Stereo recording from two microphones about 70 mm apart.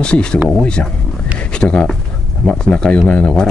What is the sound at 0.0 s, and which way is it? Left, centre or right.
Speech, centre.